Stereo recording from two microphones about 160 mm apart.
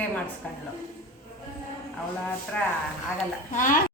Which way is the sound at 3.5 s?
55° left (ahead or behind).